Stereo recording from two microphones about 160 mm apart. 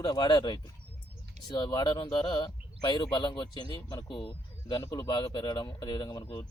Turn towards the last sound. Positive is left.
turn(degrees=30)  # may be behind; listen again after turning